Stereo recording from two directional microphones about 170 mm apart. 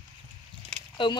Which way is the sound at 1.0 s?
30° left (ahead or behind).